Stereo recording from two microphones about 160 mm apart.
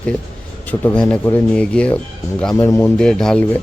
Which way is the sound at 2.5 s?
20° left (ahead or behind).